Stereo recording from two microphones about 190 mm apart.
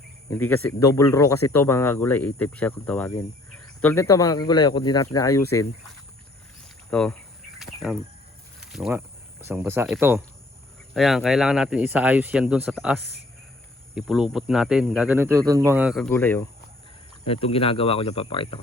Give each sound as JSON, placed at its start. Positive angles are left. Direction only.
{"t": 0.3, "sound": "speech", "side_deg": 10}
{"t": 6.9, "sound": "speech", "side_deg": 5}
{"t": 7.6, "sound": "bird", "side_deg": 0}
{"t": 8.6, "sound": "a sound", "side_deg": 0}
{"t": 8.9, "sound": "speech", "side_deg": -10}
{"t": 10.9, "sound": "speech", "side_deg": 0}
{"t": 16.0, "sound": "speech", "side_deg": 10}
{"t": 17.2, "sound": "speech", "side_deg": 30}